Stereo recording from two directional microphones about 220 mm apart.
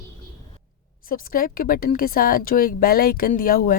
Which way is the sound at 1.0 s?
40° left (ahead or behind).